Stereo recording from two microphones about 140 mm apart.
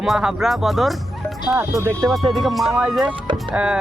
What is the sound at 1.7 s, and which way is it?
Speech, 25° right (ahead or behind).